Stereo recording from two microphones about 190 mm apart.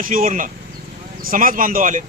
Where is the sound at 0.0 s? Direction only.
45° right (ahead or behind).